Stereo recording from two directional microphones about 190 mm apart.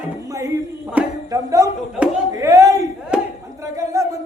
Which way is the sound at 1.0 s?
15° right (ahead or behind).